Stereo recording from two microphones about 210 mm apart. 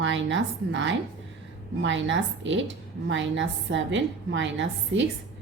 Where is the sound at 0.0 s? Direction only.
60° right (ahead or behind).